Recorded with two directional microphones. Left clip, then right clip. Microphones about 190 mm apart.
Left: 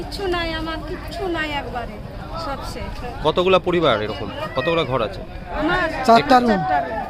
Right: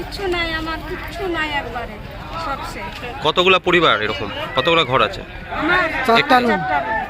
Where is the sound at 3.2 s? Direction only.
5° left (ahead or behind).